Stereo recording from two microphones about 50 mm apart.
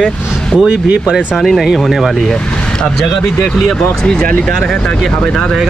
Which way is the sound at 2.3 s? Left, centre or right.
Centre.